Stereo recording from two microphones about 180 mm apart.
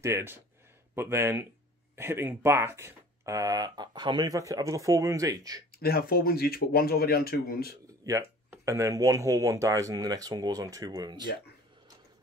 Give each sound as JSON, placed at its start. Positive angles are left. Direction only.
{"t": 0.0, "sound": "speech", "side_deg": -15}
{"t": 5.8, "sound": "speech", "side_deg": 60}
{"t": 8.0, "sound": "speech", "side_deg": -15}